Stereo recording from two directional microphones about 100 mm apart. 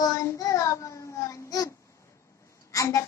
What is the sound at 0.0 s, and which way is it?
Child singing, 35° left (ahead or behind).